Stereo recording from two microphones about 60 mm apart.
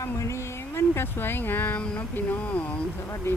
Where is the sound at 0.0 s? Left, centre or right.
Left.